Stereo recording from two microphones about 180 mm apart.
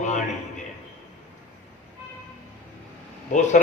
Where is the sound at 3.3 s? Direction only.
45° left (ahead or behind).